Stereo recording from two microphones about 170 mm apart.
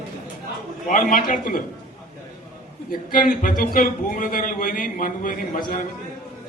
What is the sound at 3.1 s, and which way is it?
A man's voice, 55° left (ahead or behind).